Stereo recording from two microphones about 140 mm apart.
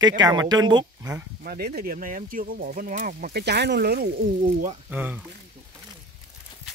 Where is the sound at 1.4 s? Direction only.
90° right.